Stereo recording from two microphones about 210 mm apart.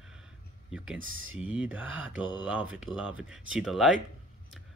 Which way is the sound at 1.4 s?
5° right (ahead or behind).